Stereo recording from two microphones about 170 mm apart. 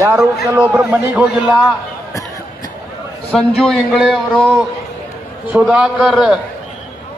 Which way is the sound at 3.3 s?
Centre (ahead or behind).